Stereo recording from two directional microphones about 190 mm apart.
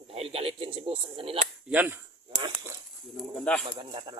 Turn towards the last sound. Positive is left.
turn(degrees=-25)  # may be behind; listen again after turning